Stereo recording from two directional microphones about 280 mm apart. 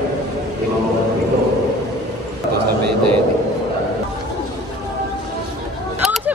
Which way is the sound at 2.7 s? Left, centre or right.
Right.